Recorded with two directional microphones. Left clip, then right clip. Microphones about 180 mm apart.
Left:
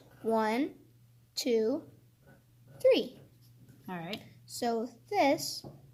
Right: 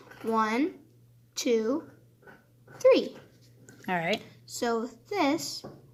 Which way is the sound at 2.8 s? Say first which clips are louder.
Right 4 dB; 30° left (ahead or behind).